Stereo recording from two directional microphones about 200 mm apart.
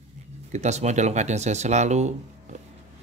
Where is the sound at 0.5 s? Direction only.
35° right (ahead or behind).